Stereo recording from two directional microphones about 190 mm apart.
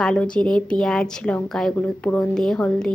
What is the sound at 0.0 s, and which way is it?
A woman's voice, 5° left (ahead or behind).